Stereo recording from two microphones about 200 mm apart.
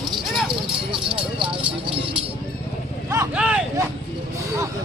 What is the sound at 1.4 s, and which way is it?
Vehicle, 25° right (ahead or behind).